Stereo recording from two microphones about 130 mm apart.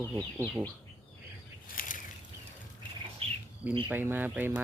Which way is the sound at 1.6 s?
90° left.